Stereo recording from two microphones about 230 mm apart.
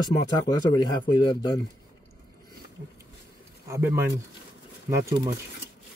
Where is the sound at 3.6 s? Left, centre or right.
Centre.